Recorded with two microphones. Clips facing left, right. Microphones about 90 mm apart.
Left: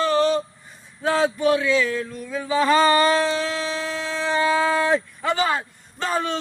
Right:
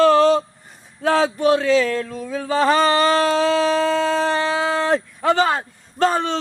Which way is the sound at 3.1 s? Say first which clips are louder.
Right 5 dB; 70° right (ahead or behind).